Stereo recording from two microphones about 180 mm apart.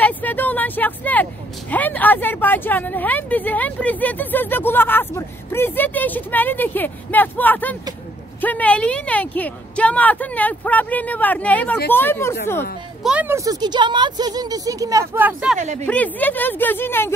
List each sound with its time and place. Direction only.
0.0 s speech: 10° left (ahead or behind)
13.0 s speech: 10° right (ahead or behind)
15.6 s a woman's voice: 40° right (ahead or behind)
15.9 s speech: 10° left (ahead or behind)